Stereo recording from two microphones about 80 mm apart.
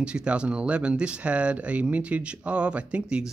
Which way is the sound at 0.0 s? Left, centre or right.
Centre.